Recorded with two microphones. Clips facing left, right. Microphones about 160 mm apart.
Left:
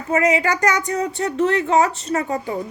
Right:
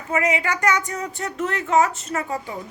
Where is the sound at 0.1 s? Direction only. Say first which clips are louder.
Left 4 dB; 40° left (ahead or behind).